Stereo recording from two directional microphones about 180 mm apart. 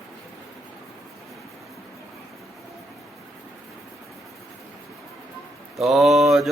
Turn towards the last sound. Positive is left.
turn(degrees=0)  # may be behind; listen again after turning